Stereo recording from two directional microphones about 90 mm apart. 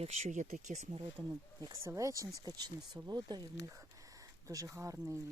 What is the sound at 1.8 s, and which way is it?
Speech, 35° right (ahead or behind).